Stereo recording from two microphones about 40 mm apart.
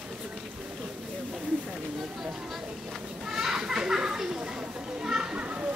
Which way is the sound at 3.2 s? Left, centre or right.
Centre.